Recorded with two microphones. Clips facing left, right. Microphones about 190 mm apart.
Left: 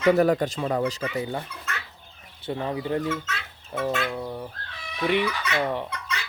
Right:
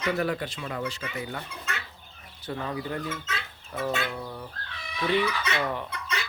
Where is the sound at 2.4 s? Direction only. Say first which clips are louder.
Left 4 dB; 25° left (ahead or behind).